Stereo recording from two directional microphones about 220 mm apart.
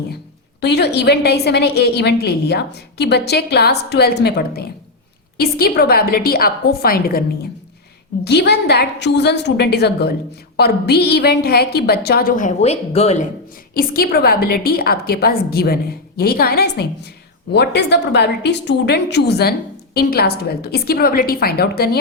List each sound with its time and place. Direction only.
0.6 s a woman's voice: 50° left (ahead or behind); by 13.2 s 30° left (ahead or behind)
13.7 s a woman's voice: 40° left (ahead or behind)